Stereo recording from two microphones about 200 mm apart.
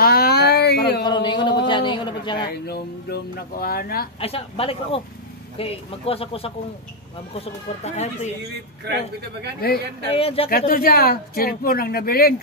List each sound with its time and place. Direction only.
0.0 s a sound: 50° left (ahead or behind)
1.0 s a sound: 20° left (ahead or behind)
2.3 s speech: 55° left (ahead or behind)
4.2 s speech: 30° left (ahead or behind)
9.6 s speech: 50° left (ahead or behind)
10.0 s speech: 30° left (ahead or behind)
10.7 s speech: 45° left (ahead or behind)